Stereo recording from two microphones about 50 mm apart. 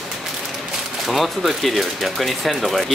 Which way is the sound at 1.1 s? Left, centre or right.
Centre.